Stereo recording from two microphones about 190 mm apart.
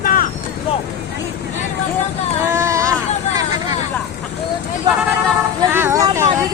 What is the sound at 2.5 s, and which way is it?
Baby cry, 15° right (ahead or behind).